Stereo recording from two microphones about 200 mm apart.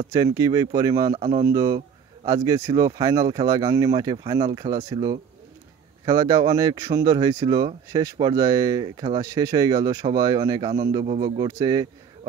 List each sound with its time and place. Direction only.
0.1 s speech: 15° right (ahead or behind)
1.1 s speech: 30° right (ahead or behind)
1.4 s speech: 15° right (ahead or behind)